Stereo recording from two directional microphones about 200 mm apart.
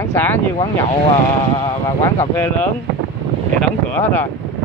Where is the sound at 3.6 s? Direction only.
10° left (ahead or behind).